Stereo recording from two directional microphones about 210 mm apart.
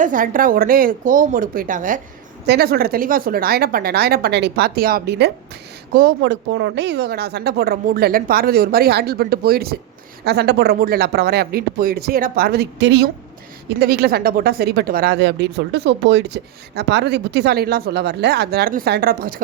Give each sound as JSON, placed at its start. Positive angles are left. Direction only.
{"t": 0.0, "sound": "speech", "side_deg": -40}